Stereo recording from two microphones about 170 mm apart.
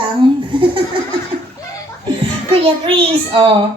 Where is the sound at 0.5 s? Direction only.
30° right (ahead or behind).